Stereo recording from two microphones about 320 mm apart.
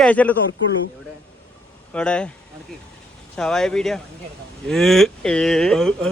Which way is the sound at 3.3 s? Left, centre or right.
Centre.